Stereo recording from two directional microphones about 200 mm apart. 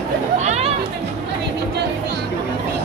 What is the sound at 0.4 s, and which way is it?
Chatter, 35° right (ahead or behind).